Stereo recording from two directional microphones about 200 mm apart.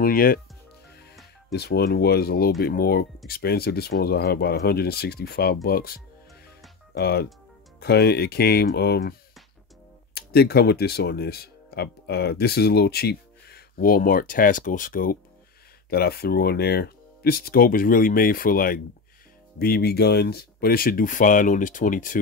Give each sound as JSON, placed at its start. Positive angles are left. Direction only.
{"t": 0.0, "sound": "speech", "side_deg": 45}
{"t": 1.5, "sound": "speech", "side_deg": 55}
{"t": 10.1, "sound": "speech", "side_deg": 50}